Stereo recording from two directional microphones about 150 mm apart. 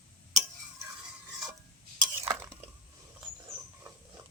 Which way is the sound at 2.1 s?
25° right (ahead or behind).